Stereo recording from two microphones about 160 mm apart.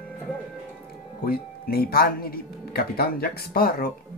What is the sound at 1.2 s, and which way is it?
Speech, 70° left (ahead or behind).